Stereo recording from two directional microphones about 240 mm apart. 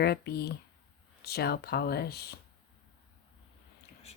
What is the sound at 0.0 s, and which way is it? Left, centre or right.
Speech, left.